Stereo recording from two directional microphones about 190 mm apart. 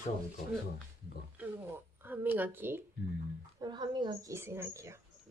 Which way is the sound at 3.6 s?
25° right (ahead or behind).